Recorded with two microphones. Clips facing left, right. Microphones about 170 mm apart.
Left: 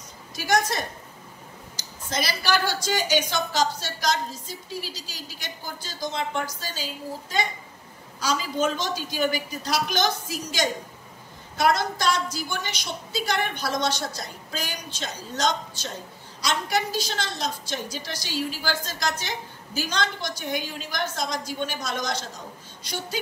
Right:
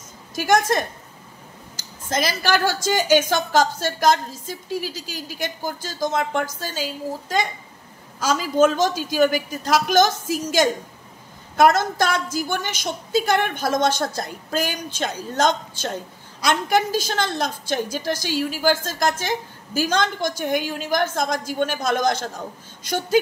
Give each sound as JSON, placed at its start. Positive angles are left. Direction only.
{"t": 0.5, "sound": "a woman's voice", "side_deg": -50}